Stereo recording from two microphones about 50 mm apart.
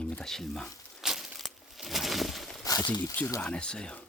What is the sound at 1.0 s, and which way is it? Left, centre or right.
Crushing, centre.